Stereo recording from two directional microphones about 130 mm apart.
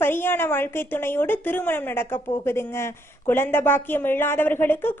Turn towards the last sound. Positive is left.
turn(degrees=15)  # may be behind; listen again after turning